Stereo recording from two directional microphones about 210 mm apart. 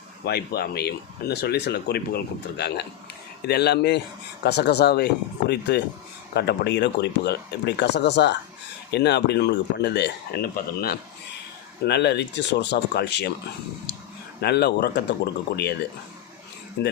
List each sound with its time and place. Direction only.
0.3 s speech: 50° left (ahead or behind)
14.4 s speech: 50° left (ahead or behind)
16.8 s speech: 50° left (ahead or behind)